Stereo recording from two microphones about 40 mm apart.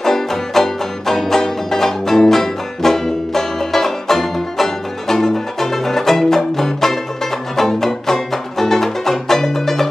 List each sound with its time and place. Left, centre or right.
0.0 s music: centre